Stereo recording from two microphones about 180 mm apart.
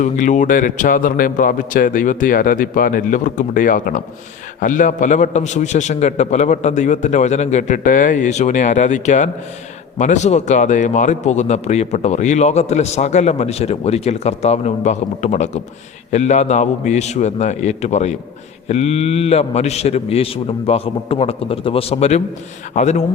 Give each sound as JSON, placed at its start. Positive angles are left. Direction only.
{"t": 0.0, "sound": "a man's voice", "side_deg": 45}